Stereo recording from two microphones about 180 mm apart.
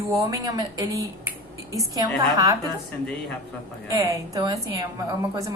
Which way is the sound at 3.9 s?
20° right (ahead or behind).